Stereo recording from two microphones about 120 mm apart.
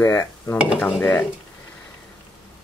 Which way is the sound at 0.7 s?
15° left (ahead or behind).